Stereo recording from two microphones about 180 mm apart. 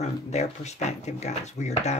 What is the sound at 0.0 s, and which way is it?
Speech, 40° left (ahead or behind).